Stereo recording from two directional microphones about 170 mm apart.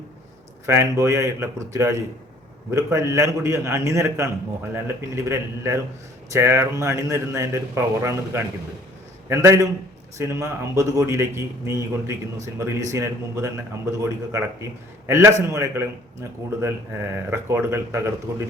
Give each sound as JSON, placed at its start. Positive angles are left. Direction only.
{"t": 0.6, "sound": "a man's voice", "side_deg": -15}